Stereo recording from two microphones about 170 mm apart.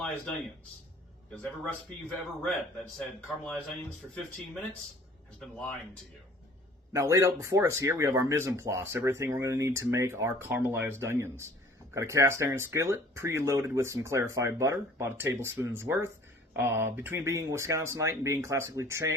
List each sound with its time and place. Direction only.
1.3 s a man's voice: 5° left (ahead or behind)
5.4 s speech: 5° left (ahead or behind)
6.9 s speech: 20° right (ahead or behind)